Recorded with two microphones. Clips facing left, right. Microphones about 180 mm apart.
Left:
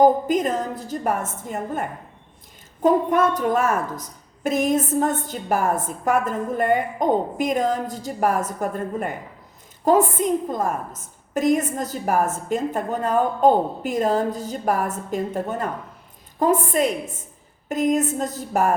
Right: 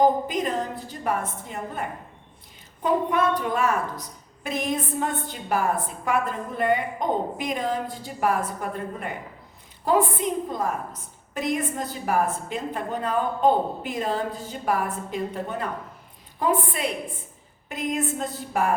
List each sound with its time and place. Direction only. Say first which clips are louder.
0.0 s a woman's voice: left 4 dB; 45° left (ahead or behind)